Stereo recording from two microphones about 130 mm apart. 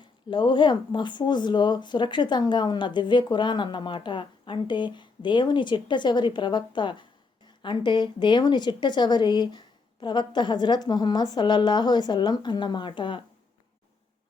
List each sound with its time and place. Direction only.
0.3 s speech: 35° left (ahead or behind)